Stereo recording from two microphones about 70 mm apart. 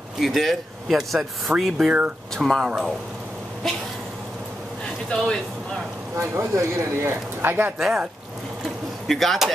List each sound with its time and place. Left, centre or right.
0.2 s speech: centre
2.3 s speech: centre
2.6 s speech: centre
3.6 s speech: centre
5.1 s speech: centre
6.1 s speech: right
9.0 s speech: centre